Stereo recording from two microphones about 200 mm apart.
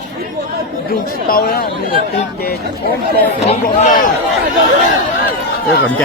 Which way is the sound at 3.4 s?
35° left (ahead or behind).